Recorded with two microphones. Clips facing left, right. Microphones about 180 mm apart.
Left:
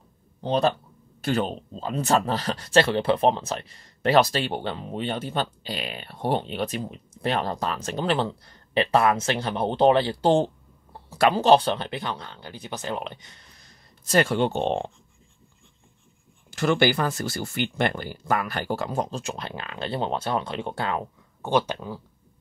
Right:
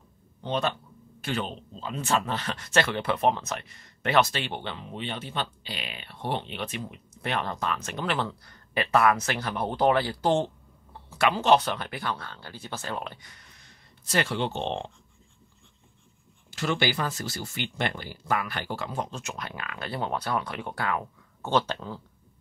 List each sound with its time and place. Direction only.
0.4 s speech: 35° left (ahead or behind)
16.4 s speech: 50° left (ahead or behind); by 21.0 s 25° left (ahead or behind)
21.4 s speech: 15° left (ahead or behind)